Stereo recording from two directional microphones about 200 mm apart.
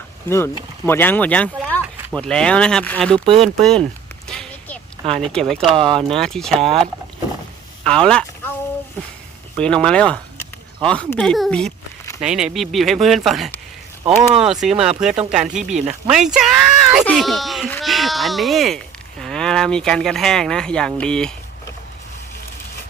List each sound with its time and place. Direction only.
0.3 s speech: 10° left (ahead or behind)
4.3 s a sound: 5° left (ahead or behind)
5.7 s speech: 25° right (ahead or behind)
6.0 s speech: centre (ahead or behind)
7.9 s a sound: 5° left (ahead or behind)
9.6 s speech: 5° left (ahead or behind)